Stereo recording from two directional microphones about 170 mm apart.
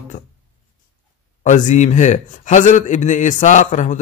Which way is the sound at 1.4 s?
45° left (ahead or behind).